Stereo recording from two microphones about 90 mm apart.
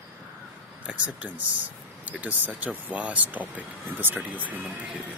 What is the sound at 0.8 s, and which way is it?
Speech, 15° right (ahead or behind).